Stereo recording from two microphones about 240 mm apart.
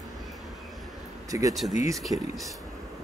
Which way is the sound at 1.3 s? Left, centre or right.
Centre.